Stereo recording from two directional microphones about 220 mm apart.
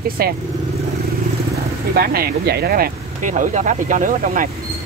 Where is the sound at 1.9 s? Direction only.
45° right (ahead or behind).